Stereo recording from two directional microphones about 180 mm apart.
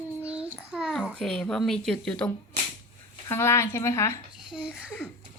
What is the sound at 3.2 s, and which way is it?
Speech, 15° left (ahead or behind).